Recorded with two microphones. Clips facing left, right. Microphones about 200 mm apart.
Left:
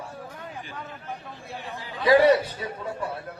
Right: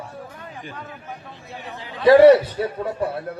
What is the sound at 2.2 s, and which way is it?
Speech, 60° right (ahead or behind).